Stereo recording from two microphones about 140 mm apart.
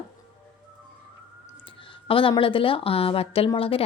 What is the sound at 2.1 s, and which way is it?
A woman's voice, 40° left (ahead or behind).